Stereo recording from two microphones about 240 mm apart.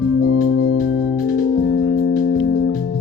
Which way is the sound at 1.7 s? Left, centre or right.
Left.